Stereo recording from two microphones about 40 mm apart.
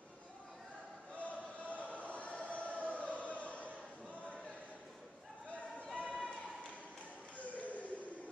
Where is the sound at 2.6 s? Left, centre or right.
Left.